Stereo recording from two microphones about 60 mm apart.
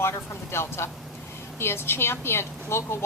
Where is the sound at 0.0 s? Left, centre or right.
Left.